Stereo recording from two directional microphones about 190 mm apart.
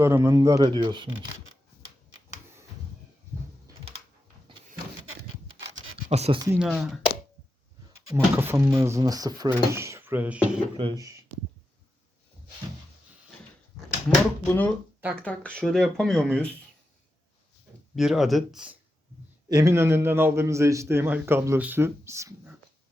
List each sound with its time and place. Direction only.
0.0 s a man's voice: 15° right (ahead or behind)
6.1 s speech: 35° right (ahead or behind)
6.6 s speech: centre (ahead or behind)
8.1 s a man's voice: 10° right (ahead or behind)
10.8 s speech: 25° right (ahead or behind)
14.4 s speech: 10° left (ahead or behind)
17.9 s speech: centre (ahead or behind)
19.5 s a man's voice: 15° right (ahead or behind)